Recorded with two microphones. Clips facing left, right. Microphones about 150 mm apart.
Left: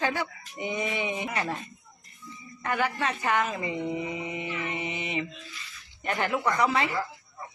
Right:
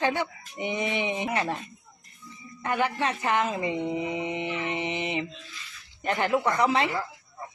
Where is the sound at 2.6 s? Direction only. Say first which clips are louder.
Right 2 dB; 20° right (ahead or behind).